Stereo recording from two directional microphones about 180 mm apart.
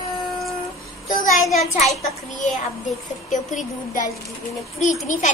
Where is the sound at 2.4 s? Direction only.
40° left (ahead or behind).